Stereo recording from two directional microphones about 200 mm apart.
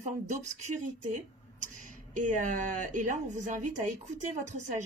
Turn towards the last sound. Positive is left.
turn(degrees=-35)  # may be behind; listen again after turning